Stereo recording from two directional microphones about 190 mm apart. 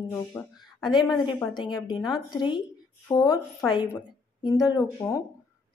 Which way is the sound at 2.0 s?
25° left (ahead or behind).